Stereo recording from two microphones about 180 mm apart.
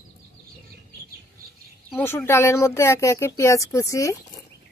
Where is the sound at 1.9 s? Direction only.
15° left (ahead or behind).